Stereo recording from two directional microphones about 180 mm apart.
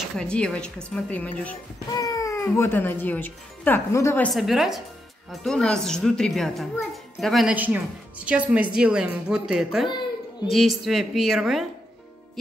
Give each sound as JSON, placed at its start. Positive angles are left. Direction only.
{"t": 0.2, "sound": "a child's voice", "side_deg": 5}
{"t": 2.0, "sound": "speech", "side_deg": 20}
{"t": 4.3, "sound": "a child's voice", "side_deg": 0}
{"t": 9.8, "sound": "a sound", "side_deg": 25}
{"t": 10.5, "sound": "a child's voice", "side_deg": 0}